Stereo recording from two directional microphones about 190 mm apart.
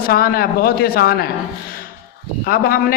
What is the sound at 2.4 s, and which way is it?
Speech, 50° left (ahead or behind).